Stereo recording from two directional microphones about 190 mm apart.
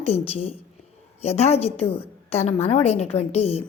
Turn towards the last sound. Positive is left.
turn(degrees=35)  # may be behind; listen again after turning